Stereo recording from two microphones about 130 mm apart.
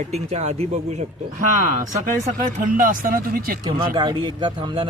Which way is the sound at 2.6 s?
90° right.